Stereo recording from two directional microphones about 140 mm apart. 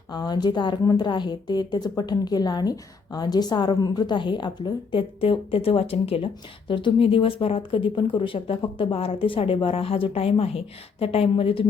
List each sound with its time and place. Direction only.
0.1 s a woman's voice: 30° left (ahead or behind)